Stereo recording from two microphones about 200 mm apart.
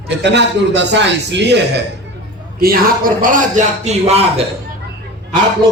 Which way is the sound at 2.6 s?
45° right (ahead or behind).